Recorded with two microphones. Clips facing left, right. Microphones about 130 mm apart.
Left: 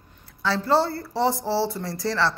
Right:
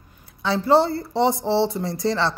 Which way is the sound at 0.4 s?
20° right (ahead or behind).